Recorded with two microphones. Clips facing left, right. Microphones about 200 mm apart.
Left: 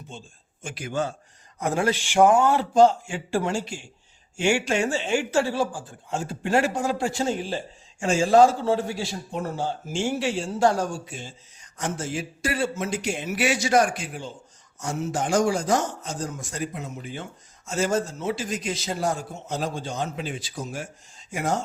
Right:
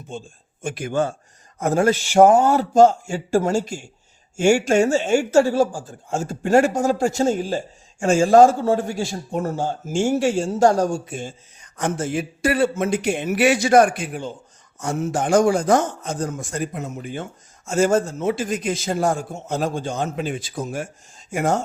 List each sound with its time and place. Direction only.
0.1 s speech: 50° right (ahead or behind)